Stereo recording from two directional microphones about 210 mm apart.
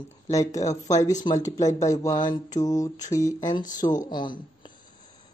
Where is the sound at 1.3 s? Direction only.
25° left (ahead or behind).